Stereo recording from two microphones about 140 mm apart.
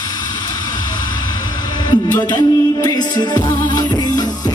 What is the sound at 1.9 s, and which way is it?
Music, 30° left (ahead or behind).